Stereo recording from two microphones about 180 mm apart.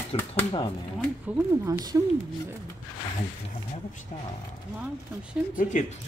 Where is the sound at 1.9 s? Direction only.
15° right (ahead or behind).